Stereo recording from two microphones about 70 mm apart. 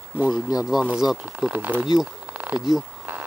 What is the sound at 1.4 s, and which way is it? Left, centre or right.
Speech, right.